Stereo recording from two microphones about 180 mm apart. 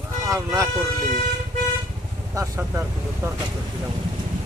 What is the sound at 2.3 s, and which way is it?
Speech, 15° right (ahead or behind).